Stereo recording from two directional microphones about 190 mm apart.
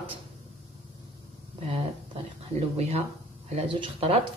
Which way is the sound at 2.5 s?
35° right (ahead or behind).